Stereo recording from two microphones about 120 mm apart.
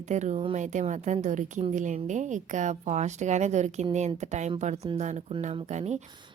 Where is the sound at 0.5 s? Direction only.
90° right.